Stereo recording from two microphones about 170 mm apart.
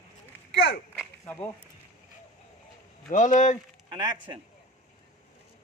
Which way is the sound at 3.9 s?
30° right (ahead or behind).